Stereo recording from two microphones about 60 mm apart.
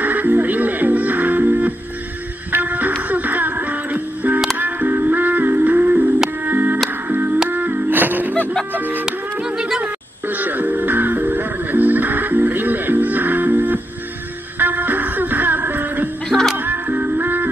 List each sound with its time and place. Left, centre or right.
0.0 s music: right
9.0 s music: centre
10.2 s music: right
16.3 s music: centre
16.5 s music: right